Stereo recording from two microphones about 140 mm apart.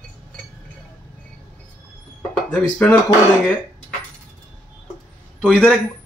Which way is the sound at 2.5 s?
10° left (ahead or behind).